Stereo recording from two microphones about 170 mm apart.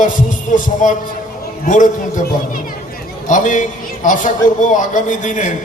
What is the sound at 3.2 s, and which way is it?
A man's voice, 50° left (ahead or behind).